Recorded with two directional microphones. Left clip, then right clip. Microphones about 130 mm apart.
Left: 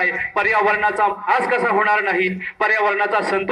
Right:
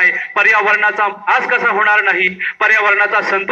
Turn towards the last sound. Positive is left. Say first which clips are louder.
# right 6 dB
turn(degrees=45)  # may be behind; listen again after turning